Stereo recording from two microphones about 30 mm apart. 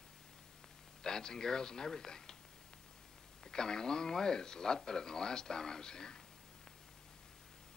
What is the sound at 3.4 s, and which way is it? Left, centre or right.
Speech, left.